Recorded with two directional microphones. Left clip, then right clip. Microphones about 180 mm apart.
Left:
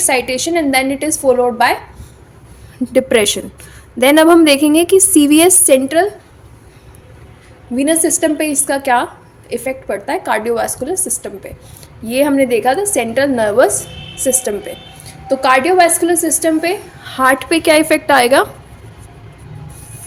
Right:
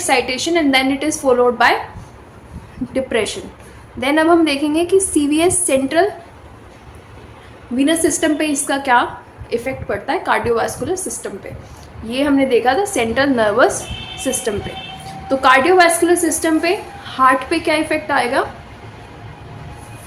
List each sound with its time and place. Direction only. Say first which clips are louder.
0.0 s a woman's voice: left 1 dB; 50° left (ahead or behind)
2.9 s a woman's voice: left 7 dB; 60° left (ahead or behind)
7.8 s a woman's voice: left 2 dB; 50° left (ahead or behind); by 18.4 s 65° left (ahead or behind)